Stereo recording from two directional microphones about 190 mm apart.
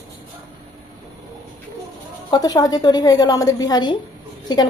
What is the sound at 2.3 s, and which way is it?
A woman's voice, 20° left (ahead or behind).